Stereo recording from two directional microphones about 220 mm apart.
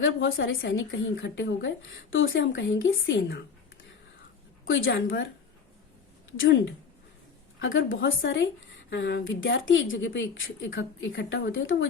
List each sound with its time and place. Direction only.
0.0 s a woman's voice: 60° left (ahead or behind)
4.6 s a woman's voice: 60° left (ahead or behind)
6.3 s a woman's voice: 60° left (ahead or behind)